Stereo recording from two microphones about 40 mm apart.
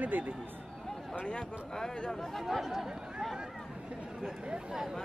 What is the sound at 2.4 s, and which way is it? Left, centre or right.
Speech, centre.